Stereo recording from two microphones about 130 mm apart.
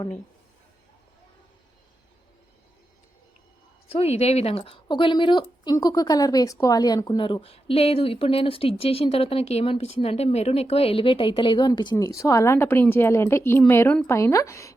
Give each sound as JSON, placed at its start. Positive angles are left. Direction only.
{"t": 3.8, "sound": "speech", "side_deg": 50}
{"t": 7.4, "sound": "a woman's voice", "side_deg": 50}